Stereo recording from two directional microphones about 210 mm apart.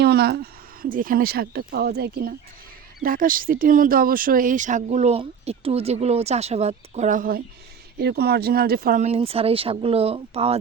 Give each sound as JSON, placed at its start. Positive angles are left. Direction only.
{"t": 0.0, "sound": "speech", "side_deg": -50}